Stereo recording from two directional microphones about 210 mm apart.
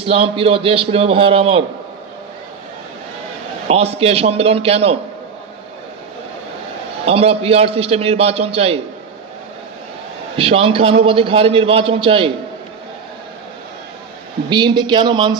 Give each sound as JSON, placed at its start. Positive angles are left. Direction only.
{"t": 0.0, "sound": "a man's voice", "side_deg": -25}
{"t": 3.7, "sound": "a man's voice", "side_deg": -30}
{"t": 7.0, "sound": "a man's voice", "side_deg": -30}
{"t": 10.3, "sound": "a man's voice", "side_deg": -25}
{"t": 14.5, "sound": "a man's voice", "side_deg": -20}